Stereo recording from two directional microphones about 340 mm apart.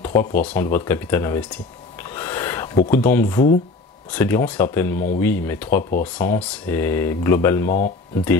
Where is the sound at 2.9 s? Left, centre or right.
Centre.